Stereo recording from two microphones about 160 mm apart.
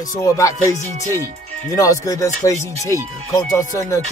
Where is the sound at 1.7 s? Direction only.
20° left (ahead or behind).